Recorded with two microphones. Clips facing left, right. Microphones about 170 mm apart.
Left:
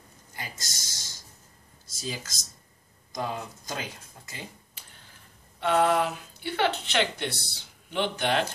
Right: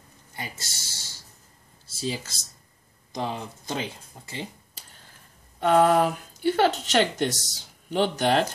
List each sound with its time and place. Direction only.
0.4 s speech: 30° right (ahead or behind)
1.9 s speech: 30° right (ahead or behind)
5.6 s speech: 40° right (ahead or behind)